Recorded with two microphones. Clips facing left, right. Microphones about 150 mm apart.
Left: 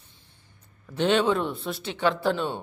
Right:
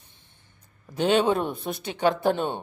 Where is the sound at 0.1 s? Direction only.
20° right (ahead or behind).